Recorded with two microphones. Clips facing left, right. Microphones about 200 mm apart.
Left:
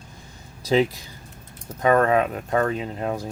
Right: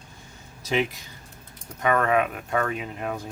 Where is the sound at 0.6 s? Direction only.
35° left (ahead or behind).